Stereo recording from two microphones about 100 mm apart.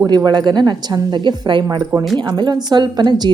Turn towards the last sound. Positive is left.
turn(degrees=-45)  # may be behind; listen again after turning